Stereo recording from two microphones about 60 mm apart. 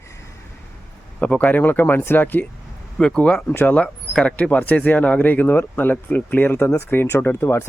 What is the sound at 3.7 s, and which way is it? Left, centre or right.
Speech, centre.